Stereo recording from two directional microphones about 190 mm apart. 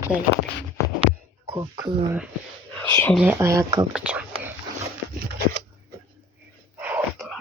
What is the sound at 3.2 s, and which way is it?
Speech, 10° right (ahead or behind).